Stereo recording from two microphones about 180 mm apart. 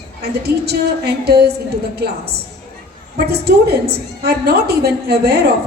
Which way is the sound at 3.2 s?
60° right (ahead or behind).